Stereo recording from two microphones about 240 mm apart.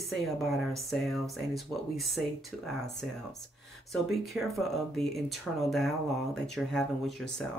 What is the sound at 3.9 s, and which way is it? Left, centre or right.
Speech, centre.